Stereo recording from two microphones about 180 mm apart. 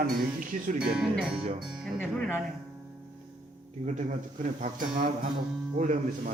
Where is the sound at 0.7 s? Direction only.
5° right (ahead or behind).